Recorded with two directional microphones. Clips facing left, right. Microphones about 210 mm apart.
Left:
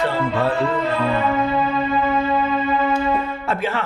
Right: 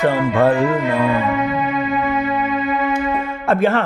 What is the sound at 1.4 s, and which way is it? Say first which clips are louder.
Music: right 1 dB; 30° left (ahead or behind).